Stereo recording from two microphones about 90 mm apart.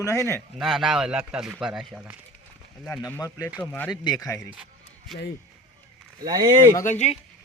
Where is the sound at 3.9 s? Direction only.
50° left (ahead or behind).